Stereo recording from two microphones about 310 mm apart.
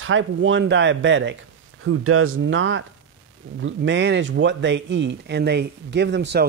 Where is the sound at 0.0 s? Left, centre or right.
Right.